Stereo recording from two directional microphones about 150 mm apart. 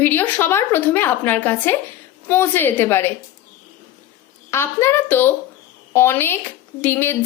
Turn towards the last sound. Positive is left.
turn(degrees=15)  # may be behind; listen again after turning